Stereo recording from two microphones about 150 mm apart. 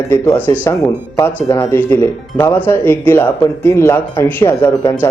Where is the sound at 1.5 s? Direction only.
25° left (ahead or behind).